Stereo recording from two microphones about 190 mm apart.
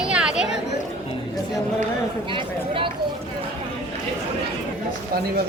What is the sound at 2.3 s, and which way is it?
Speech, 25° right (ahead or behind).